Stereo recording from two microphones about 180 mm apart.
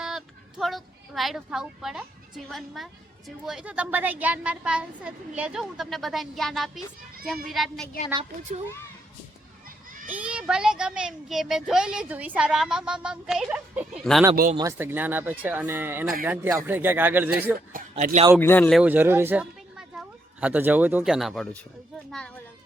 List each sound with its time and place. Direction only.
0.0 s speech: centre (ahead or behind)
9.6 s children playing: 45° right (ahead or behind)
10.1 s speech: 5° right (ahead or behind)
14.5 s speech: 15° right (ahead or behind)
17.9 s speech: 40° right (ahead or behind)
18.3 s speech: 10° left (ahead or behind)
18.8 s speech: 10° right (ahead or behind)